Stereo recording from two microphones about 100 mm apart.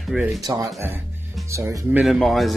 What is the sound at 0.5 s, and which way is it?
Speech, 35° right (ahead or behind).